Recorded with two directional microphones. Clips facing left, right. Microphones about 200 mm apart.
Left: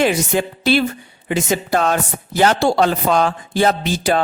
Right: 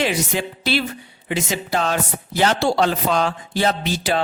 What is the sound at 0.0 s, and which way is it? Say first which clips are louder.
Speech: left 5 dB; 50° left (ahead or behind).